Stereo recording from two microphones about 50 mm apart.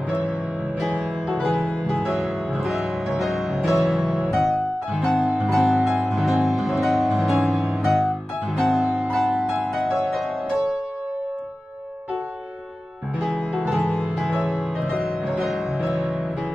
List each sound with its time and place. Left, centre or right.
1.5 s music: centre
4.9 s music: centre
5.5 s music: centre
14.1 s music: centre